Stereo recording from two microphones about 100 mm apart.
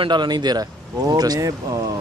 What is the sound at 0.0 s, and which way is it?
Speech, 50° right (ahead or behind).